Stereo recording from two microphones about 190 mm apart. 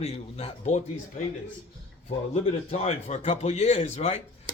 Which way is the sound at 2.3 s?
35° left (ahead or behind).